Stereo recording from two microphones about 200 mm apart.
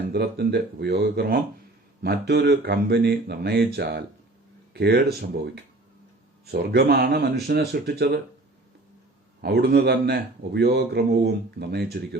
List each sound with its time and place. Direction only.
0.1 s a man's voice: 55° right (ahead or behind)
9.4 s a man's voice: 55° right (ahead or behind)